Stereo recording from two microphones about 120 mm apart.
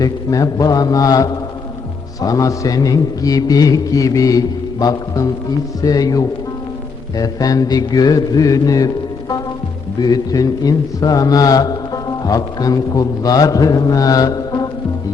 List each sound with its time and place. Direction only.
0.0 s mantra: 30° left (ahead or behind)
10.0 s mantra: 30° left (ahead or behind)